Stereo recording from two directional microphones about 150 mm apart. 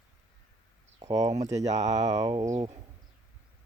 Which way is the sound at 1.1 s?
25° right (ahead or behind).